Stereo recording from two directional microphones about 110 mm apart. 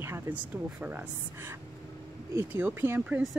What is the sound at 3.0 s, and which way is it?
Speech, 10° right (ahead or behind).